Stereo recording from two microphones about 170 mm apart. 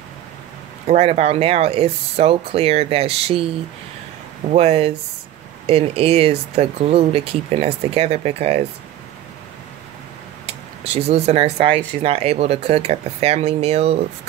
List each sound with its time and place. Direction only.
0.8 s speech: 40° right (ahead or behind)
10.4 s speech: 35° right (ahead or behind)